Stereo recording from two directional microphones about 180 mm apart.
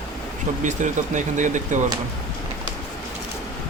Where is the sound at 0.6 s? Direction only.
45° right (ahead or behind).